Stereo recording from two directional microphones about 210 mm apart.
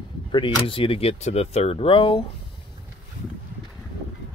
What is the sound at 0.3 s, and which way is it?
Speech, 25° left (ahead or behind).